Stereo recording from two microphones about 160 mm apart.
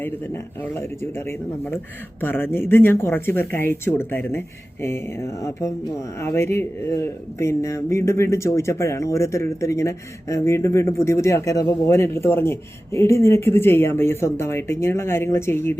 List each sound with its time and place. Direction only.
0.6 s speech: 15° left (ahead or behind)